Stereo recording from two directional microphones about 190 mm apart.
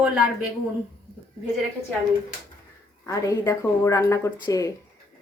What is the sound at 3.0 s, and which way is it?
A woman's voice, 15° left (ahead or behind).